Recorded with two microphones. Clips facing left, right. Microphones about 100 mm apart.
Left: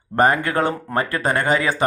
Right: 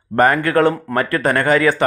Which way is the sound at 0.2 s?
20° left (ahead or behind).